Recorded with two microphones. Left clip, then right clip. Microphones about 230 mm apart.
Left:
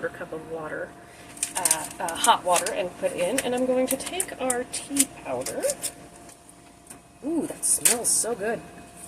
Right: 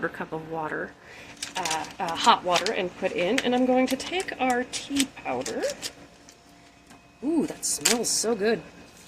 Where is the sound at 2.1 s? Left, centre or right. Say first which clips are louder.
Even; right.